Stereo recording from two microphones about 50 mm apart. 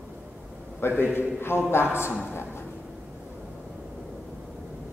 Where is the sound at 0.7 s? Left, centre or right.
Left.